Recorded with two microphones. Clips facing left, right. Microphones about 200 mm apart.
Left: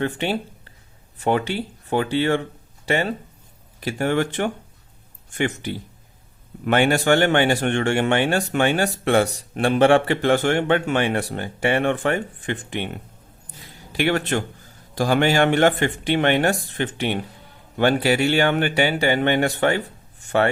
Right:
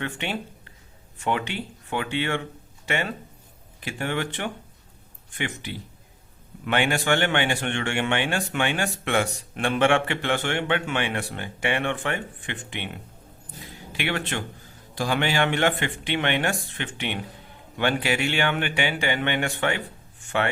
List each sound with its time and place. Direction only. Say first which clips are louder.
0.0 s speech: left 7 dB; 35° left (ahead or behind)
13.9 s speech: left 7 dB; 40° left (ahead or behind)